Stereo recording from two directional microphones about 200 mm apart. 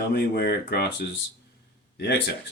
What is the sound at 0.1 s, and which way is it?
Speech, 55° left (ahead or behind).